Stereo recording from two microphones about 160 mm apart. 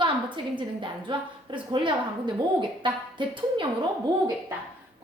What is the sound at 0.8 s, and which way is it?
A woman's voice, 30° right (ahead or behind).